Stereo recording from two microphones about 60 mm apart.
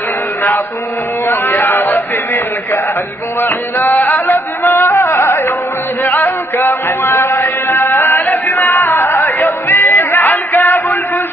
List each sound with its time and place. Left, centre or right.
1.2 s a man's voice: left
3.3 s music: left
7.7 s music: left